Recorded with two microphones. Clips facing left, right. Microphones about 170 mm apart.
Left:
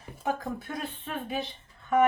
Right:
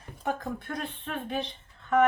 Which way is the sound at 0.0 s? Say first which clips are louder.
Left 1 dB; 5° left (ahead or behind).